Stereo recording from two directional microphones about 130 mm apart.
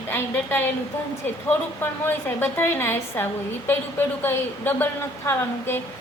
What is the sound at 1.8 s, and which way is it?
A woman's voice, 15° left (ahead or behind).